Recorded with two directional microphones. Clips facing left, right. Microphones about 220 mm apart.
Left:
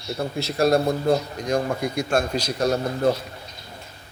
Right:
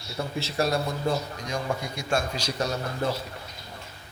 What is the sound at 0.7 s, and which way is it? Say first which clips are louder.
A man's voice: left 7 dB; 55° left (ahead or behind).